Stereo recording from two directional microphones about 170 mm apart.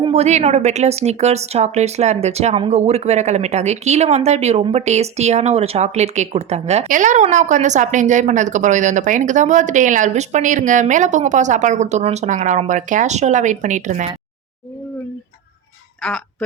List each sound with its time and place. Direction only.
0.0 s speech: 40° right (ahead or behind)
16.0 s speech: 5° left (ahead or behind)